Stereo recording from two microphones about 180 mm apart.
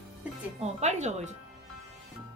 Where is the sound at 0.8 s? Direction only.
40° right (ahead or behind).